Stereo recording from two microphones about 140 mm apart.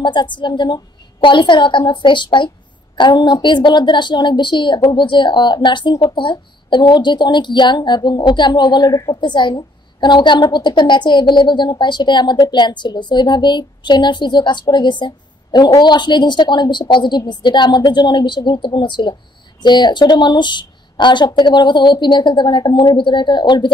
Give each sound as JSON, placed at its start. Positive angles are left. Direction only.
{"t": 0.0, "sound": "a woman's voice", "side_deg": 35}